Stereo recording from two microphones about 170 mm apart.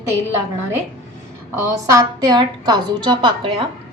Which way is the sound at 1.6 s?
20° right (ahead or behind).